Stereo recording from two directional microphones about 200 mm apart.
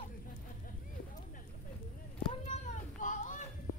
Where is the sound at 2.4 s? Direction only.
35° left (ahead or behind).